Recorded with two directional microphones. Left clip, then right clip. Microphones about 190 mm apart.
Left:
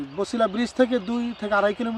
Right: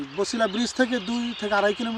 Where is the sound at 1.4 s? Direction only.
5° left (ahead or behind).